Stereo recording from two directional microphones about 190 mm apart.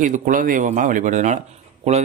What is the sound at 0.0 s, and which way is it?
Speech, 45° right (ahead or behind).